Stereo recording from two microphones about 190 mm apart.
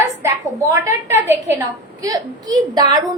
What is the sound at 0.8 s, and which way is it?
A woman's voice, 15° right (ahead or behind).